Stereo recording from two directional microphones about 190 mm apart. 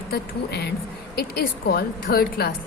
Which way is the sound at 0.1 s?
60° left (ahead or behind).